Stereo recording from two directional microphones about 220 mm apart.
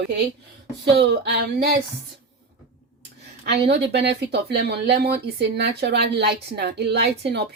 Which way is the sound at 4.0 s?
50° right (ahead or behind).